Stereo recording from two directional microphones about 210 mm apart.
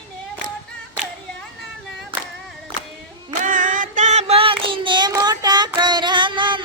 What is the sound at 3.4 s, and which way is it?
Child singing, 40° right (ahead or behind).